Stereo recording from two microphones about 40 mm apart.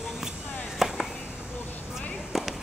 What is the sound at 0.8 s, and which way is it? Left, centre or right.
Chop, centre.